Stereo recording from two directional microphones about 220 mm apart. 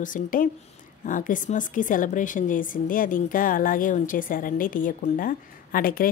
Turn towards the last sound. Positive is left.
turn(degrees=40)  # may be behind; listen again after turning